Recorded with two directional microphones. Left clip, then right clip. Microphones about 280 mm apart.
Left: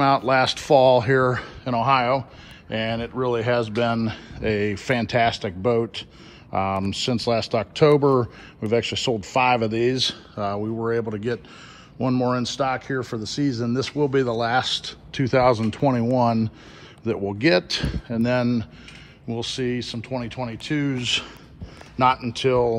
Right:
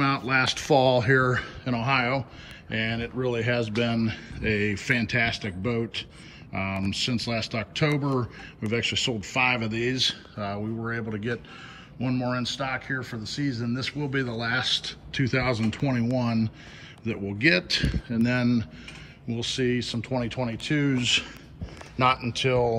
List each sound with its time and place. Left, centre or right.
0.3 s speech: centre